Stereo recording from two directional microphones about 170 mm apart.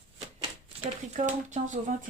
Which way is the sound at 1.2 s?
45° right (ahead or behind).